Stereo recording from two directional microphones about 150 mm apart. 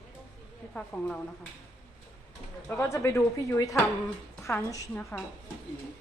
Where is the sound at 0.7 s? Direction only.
5° left (ahead or behind).